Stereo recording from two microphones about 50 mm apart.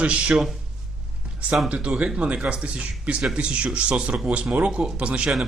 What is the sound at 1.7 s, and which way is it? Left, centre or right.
Speech, centre.